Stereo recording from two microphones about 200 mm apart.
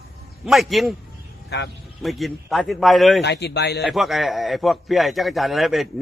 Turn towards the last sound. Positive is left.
turn(degrees=0)  # may be behind; listen again after turning